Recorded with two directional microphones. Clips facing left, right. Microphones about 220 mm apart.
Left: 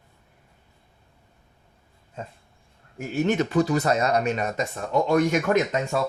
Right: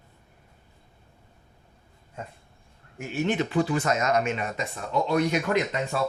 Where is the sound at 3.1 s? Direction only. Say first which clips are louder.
Left 3 dB; 45° left (ahead or behind).